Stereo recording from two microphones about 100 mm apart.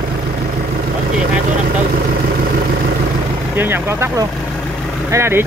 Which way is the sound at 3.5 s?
20° right (ahead or behind).